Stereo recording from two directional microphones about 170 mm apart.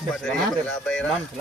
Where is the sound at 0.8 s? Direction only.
5° left (ahead or behind).